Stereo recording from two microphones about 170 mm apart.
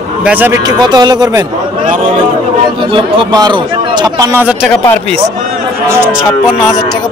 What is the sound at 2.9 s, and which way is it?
A man's voice, 30° right (ahead or behind).